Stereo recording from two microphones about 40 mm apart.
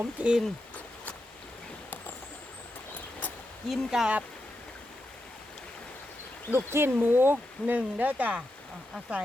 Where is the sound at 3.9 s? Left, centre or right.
Centre.